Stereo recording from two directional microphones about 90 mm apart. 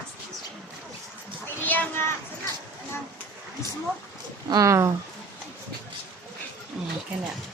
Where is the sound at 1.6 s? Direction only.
20° left (ahead or behind).